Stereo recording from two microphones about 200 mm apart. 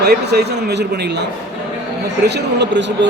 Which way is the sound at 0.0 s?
55° right (ahead or behind).